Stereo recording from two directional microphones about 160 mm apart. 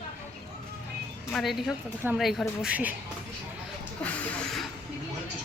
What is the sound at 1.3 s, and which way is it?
Speech, centre (ahead or behind).